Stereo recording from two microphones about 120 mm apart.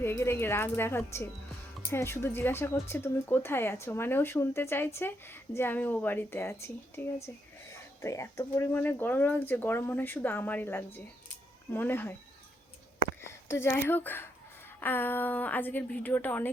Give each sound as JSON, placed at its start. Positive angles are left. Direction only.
{"t": 0.0, "sound": "speech", "side_deg": 20}
{"t": 13.2, "sound": "speech", "side_deg": 20}